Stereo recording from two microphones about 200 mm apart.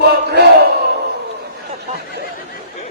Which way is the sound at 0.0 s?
55° right (ahead or behind).